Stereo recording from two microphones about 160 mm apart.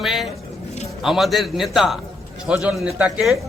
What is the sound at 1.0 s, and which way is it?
A man's voice, centre (ahead or behind).